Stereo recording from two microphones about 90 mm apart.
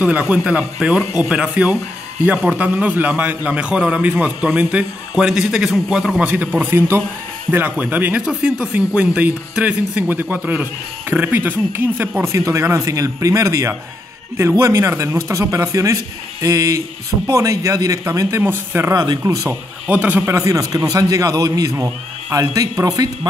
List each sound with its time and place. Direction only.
0.0 s speech: 15° right (ahead or behind)
6.2 s speech: 20° right (ahead or behind)
12.3 s a man's voice: 30° right (ahead or behind)
18.4 s speech: 25° right (ahead or behind)
18.9 s a man's voice: 40° right (ahead or behind)
19.9 s speech: 15° right (ahead or behind)
20.2 s a man's voice: 35° right (ahead or behind)